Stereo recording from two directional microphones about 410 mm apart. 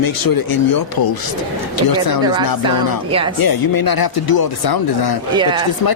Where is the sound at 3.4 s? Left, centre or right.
Left.